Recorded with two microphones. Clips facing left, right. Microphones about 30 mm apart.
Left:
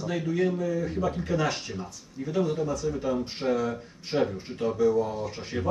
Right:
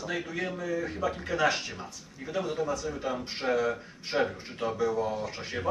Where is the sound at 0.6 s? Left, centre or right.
Right.